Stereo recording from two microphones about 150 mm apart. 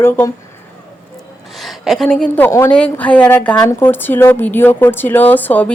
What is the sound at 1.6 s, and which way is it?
A woman's voice, centre (ahead or behind).